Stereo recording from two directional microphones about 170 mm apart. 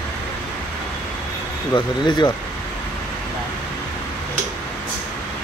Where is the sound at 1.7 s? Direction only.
25° left (ahead or behind).